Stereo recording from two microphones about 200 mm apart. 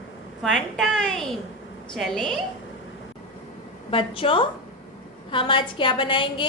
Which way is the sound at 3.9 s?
25° left (ahead or behind).